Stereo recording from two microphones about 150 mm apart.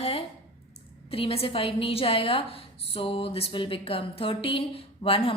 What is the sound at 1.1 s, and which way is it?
A woman's voice, 40° left (ahead or behind).